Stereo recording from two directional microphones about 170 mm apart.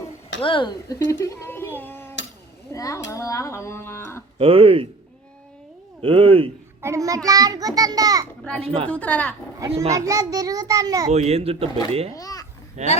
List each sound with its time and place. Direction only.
0.4 s speech: 30° left (ahead or behind)
1.2 s a child's voice: 15° left (ahead or behind)
3.1 s music: 20° left (ahead or behind)
4.4 s speech: 35° right (ahead or behind)
6.0 s speech: 35° right (ahead or behind)
6.8 s a child's voice: 20° right (ahead or behind)
8.6 s speech: 35° right (ahead or behind)
8.9 s music: 10° left (ahead or behind)
9.6 s a child's voice: 20° right (ahead or behind)
11.1 s speech: 40° right (ahead or behind)
12.1 s speech: 20° left (ahead or behind)
12.8 s speech: 40° right (ahead or behind)